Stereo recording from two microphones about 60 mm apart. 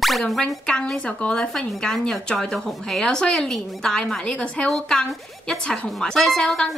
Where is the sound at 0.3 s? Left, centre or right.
Centre.